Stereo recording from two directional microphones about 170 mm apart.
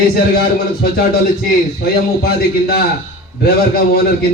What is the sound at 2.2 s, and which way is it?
A man's voice, 65° left (ahead or behind).